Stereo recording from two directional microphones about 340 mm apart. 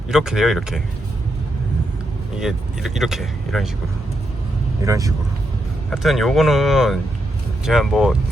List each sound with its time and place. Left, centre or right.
0.1 s speech: centre
2.4 s speech: centre
4.9 s speech: centre